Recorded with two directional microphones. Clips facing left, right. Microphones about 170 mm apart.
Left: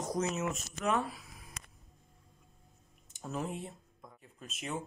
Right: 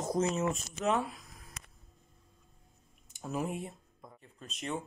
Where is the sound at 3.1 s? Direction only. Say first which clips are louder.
Right 3 dB; 10° right (ahead or behind).